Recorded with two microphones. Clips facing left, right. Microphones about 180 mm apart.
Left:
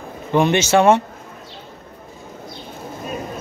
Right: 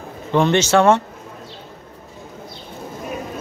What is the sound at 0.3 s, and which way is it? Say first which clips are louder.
Speech: even; 15° left (ahead or behind).